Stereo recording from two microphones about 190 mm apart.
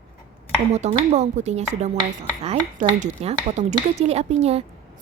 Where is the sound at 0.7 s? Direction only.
35° right (ahead or behind).